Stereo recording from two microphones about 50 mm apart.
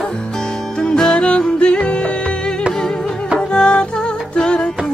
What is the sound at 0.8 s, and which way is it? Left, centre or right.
Music, centre.